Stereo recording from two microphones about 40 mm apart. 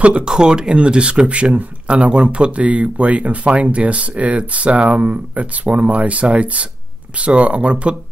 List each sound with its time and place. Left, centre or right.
0.2 s speech: right